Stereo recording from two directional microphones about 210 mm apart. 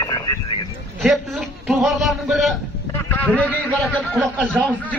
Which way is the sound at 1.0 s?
Centre (ahead or behind).